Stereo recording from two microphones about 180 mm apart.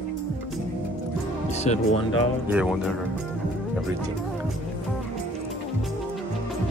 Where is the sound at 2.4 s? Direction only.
5° right (ahead or behind).